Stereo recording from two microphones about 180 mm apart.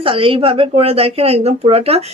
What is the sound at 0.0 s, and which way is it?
Speech, 30° right (ahead or behind).